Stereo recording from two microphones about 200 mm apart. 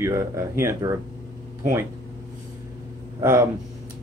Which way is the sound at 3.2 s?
15° right (ahead or behind).